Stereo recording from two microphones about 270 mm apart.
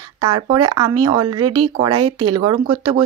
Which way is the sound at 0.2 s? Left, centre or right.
Centre.